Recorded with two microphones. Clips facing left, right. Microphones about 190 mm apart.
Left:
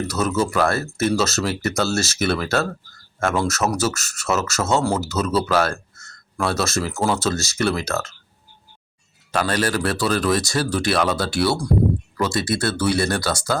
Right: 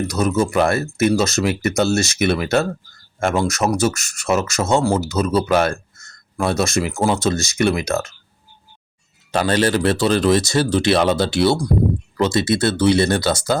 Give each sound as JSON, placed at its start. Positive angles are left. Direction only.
{"t": 0.1, "sound": "speech", "side_deg": -15}
{"t": 9.3, "sound": "speech", "side_deg": -25}